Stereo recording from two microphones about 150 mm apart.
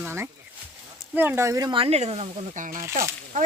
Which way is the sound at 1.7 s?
40° right (ahead or behind).